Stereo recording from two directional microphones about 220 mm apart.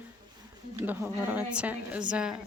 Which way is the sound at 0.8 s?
10° right (ahead or behind).